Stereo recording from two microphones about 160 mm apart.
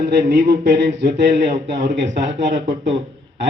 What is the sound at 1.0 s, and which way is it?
Speech, 50° right (ahead or behind).